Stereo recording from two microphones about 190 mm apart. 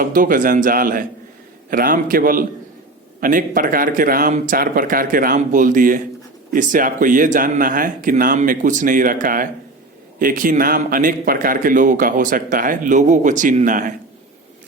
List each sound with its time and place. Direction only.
0.0 s a man's voice: 45° right (ahead or behind)